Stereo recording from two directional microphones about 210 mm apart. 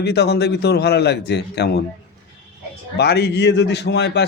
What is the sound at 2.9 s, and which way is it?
Speech, 50° left (ahead or behind).